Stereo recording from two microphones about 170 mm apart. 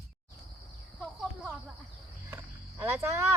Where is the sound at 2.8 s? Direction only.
15° right (ahead or behind).